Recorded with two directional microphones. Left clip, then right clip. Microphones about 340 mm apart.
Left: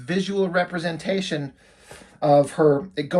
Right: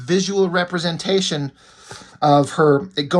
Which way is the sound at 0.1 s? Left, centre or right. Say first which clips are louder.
Right 5 dB; centre.